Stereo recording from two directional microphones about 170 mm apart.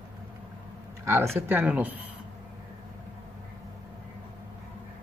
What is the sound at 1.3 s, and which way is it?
Speech, 10° right (ahead or behind).